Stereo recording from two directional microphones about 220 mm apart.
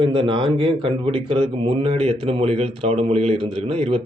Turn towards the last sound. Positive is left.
turn(degrees=-25)  # may be behind; listen again after turning